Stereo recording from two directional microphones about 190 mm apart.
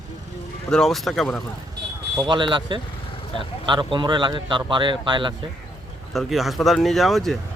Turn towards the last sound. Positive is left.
turn(degrees=0)  # may be behind; listen again after turning